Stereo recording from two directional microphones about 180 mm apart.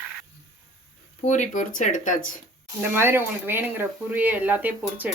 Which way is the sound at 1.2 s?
40° left (ahead or behind).